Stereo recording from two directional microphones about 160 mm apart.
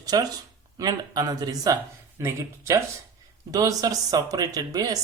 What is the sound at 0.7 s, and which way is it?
Speech, 25° right (ahead or behind).